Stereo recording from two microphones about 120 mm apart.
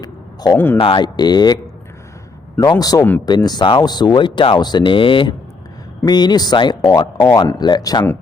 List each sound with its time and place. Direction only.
0.5 s speech: 15° left (ahead or behind)
0.8 s speech: 45° left (ahead or behind)
2.6 s speech: 30° left (ahead or behind)